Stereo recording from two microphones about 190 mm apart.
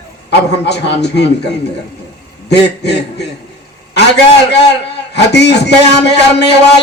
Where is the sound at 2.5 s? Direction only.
65° left (ahead or behind).